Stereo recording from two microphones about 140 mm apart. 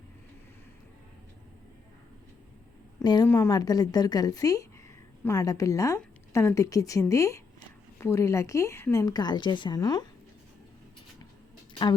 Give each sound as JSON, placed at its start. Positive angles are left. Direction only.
{"t": 3.0, "sound": "a woman's voice", "side_deg": 30}
{"t": 3.2, "sound": "a woman's voice", "side_deg": 20}
{"t": 11.7, "sound": "a sound", "side_deg": 30}